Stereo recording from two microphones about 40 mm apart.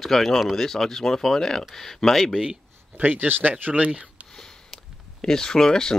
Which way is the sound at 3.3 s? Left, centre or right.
Right.